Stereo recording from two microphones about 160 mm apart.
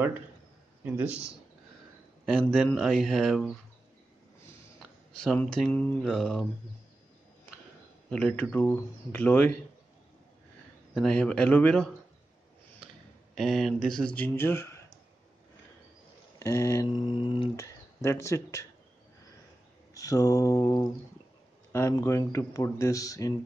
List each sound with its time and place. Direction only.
0.8 s a man's voice: 10° right (ahead or behind)
2.2 s speech: 5° left (ahead or behind)
5.2 s speech: 5° left (ahead or behind)
8.1 s speech: 5° left (ahead or behind)
11.0 s speech: 5° left (ahead or behind)
16.3 s speech: 20° left (ahead or behind)
17.1 s a sound: 30° left (ahead or behind)
17.6 s speech: 15° left (ahead or behind)
19.9 s speech: 20° left (ahead or behind)